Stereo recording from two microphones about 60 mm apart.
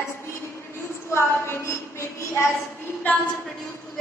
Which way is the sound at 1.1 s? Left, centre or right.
Left.